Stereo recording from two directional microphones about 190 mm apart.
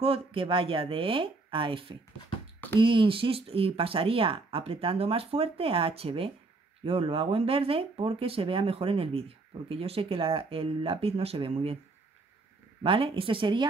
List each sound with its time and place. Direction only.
0.0 s speech: 30° right (ahead or behind)
12.8 s speech: 25° right (ahead or behind)